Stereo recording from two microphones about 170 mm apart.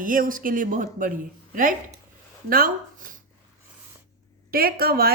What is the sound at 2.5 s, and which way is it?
Speech, 55° right (ahead or behind).